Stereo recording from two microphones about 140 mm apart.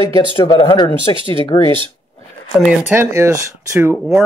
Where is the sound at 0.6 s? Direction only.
40° left (ahead or behind).